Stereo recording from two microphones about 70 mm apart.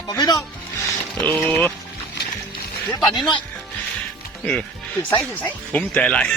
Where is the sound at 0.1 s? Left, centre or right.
Left.